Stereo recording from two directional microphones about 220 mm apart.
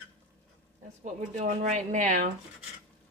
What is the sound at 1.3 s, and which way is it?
Speech, 35° right (ahead or behind).